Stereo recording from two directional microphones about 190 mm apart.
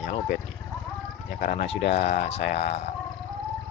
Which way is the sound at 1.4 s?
45° left (ahead or behind).